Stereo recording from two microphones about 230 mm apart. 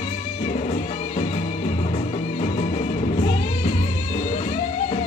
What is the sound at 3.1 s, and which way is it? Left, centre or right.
Music, left.